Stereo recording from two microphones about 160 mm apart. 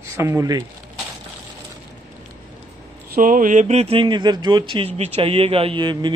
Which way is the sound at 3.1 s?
60° right (ahead or behind).